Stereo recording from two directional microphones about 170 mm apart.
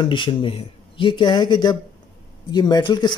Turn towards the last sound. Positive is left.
turn(degrees=25)  # may be behind; listen again after turning